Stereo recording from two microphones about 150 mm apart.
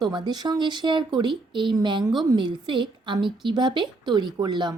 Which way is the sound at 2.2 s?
30° right (ahead or behind).